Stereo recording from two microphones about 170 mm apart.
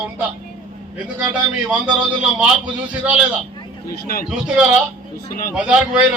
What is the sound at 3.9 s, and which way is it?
Speech, 60° left (ahead or behind).